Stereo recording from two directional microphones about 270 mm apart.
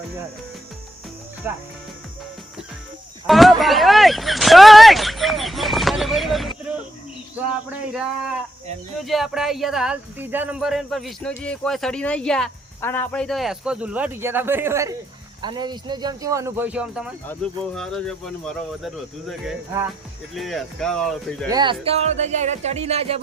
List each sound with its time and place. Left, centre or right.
1.5 s speech: centre
3.2 s speech: centre
7.7 s speech: centre
21.5 s speech: centre